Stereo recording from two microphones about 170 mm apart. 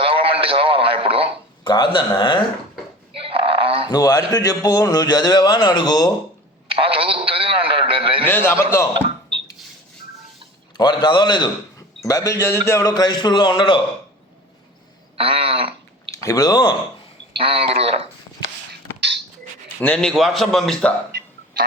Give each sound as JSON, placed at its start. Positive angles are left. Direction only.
{"t": 0.0, "sound": "radio", "side_deg": -30}
{"t": 1.6, "sound": "a man's voice", "side_deg": 25}
{"t": 3.2, "sound": "a sound", "side_deg": -30}
{"t": 3.8, "sound": "a man's voice", "side_deg": 20}
{"t": 6.7, "sound": "radio", "side_deg": -30}
{"t": 8.3, "sound": "a man's voice", "side_deg": 10}
{"t": 8.9, "sound": "a sound", "side_deg": -30}
{"t": 10.8, "sound": "a man's voice", "side_deg": 25}
{"t": 15.2, "sound": "speech", "side_deg": -30}
{"t": 16.1, "sound": "speech", "side_deg": 20}
{"t": 17.3, "sound": "speech", "side_deg": -35}
{"t": 18.7, "sound": "a sound", "side_deg": -90}
{"t": 19.8, "sound": "a man's voice", "side_deg": 5}
{"t": 21.1, "sound": "a sound", "side_deg": -75}